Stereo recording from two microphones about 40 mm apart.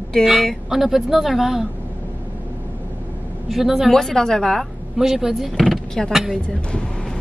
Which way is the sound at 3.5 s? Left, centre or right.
Centre.